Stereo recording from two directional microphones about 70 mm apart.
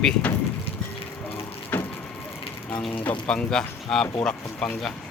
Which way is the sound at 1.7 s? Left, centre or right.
Left.